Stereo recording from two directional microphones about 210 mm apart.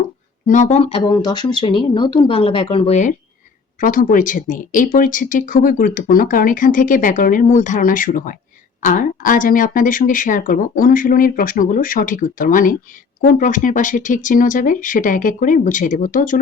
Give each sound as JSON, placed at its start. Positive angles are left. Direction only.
{"t": 0.4, "sound": "speech", "side_deg": 35}